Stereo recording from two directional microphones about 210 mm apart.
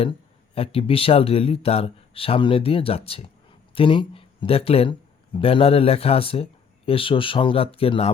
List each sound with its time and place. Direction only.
0.5 s speech: 25° left (ahead or behind)